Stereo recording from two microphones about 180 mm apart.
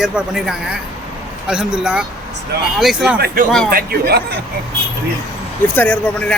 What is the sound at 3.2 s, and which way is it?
A man's voice, 60° right (ahead or behind).